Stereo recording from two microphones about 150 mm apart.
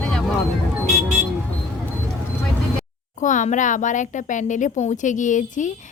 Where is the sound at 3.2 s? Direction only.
55° left (ahead or behind).